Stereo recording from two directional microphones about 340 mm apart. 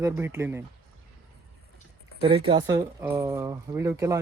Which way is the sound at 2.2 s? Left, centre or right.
Centre.